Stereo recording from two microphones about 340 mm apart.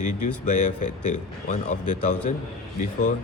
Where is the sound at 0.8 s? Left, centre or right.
Left.